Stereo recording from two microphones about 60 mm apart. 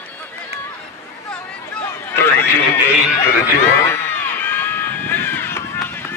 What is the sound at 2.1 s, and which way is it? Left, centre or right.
Run, left.